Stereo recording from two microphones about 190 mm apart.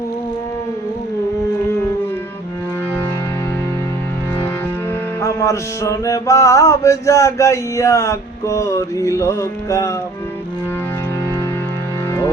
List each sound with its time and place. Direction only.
5.2 s mantra: 15° left (ahead or behind)